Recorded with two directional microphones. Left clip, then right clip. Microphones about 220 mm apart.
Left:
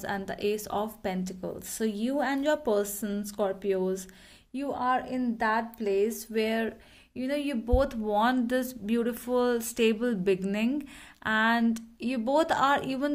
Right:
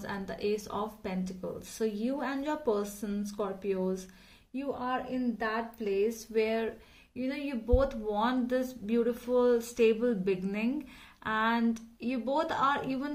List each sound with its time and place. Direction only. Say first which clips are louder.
0.0 s speech: left 4 dB; 45° left (ahead or behind)